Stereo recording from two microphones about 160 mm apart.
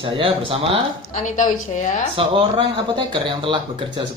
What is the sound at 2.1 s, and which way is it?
Speech, 35° right (ahead or behind).